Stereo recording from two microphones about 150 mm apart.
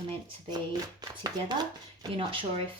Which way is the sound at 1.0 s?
25° right (ahead or behind).